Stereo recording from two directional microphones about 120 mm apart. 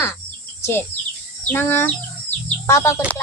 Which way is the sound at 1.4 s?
15° left (ahead or behind).